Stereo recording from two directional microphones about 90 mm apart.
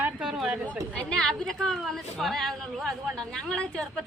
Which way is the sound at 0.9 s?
10° left (ahead or behind).